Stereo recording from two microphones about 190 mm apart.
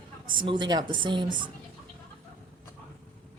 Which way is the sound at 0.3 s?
25° right (ahead or behind).